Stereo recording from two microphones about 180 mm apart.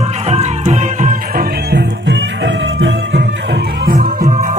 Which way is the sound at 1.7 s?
85° right.